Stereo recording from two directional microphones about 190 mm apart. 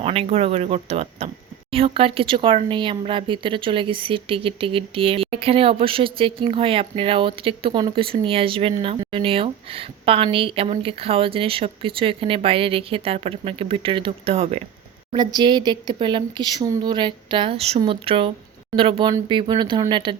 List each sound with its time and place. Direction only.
0.0 s speech: 30° right (ahead or behind)